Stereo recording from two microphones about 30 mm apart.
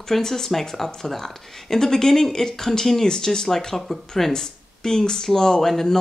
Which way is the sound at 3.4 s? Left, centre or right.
Centre.